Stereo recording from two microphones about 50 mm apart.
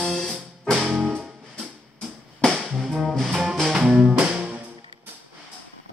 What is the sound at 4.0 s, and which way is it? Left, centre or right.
Music, right.